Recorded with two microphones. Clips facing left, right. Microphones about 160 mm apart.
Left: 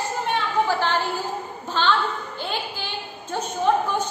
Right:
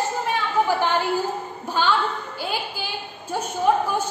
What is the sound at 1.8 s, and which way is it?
Speech, 10° right (ahead or behind).